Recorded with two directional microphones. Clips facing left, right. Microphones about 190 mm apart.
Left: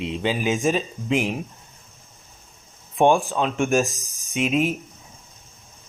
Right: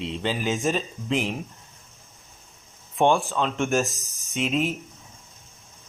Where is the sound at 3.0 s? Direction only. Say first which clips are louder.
Left 3 dB; 15° left (ahead or behind).